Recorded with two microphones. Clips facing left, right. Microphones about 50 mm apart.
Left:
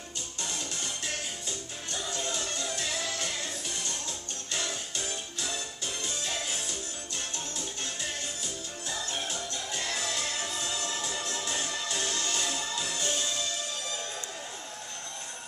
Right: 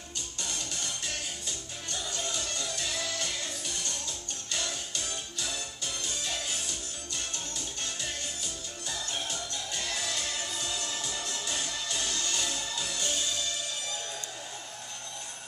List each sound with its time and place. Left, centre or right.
0.4 s music: centre
8.8 s music: centre